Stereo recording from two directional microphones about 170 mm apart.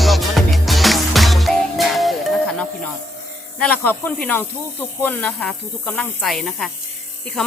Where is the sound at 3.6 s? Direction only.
10° left (ahead or behind).